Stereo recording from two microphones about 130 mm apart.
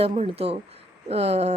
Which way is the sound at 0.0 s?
50° right (ahead or behind).